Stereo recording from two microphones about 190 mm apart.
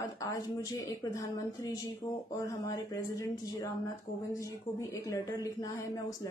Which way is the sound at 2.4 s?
15° left (ahead or behind).